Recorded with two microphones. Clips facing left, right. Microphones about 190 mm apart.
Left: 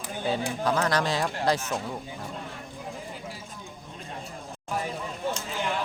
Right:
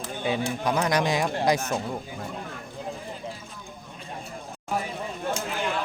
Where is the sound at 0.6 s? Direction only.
15° right (ahead or behind).